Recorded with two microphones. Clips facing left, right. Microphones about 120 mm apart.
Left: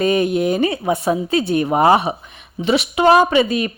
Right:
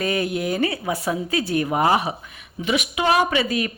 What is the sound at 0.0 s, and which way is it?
Speech, 20° left (ahead or behind).